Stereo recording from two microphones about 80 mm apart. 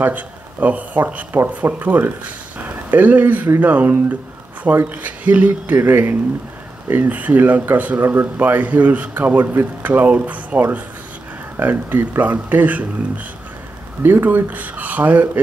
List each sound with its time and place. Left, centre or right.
0.0 s a man's voice: centre
14.0 s a man's voice: right